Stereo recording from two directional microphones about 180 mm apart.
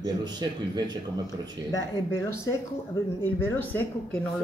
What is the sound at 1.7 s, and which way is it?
A woman's voice, 20° left (ahead or behind).